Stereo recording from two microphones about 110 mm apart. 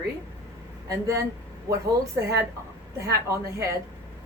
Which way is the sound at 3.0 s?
25° right (ahead or behind).